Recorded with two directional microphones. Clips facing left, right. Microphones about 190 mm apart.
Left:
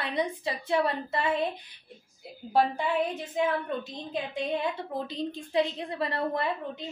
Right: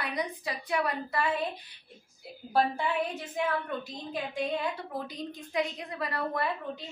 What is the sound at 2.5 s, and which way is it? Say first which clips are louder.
A woman's voice: left 2 dB; 20° left (ahead or behind).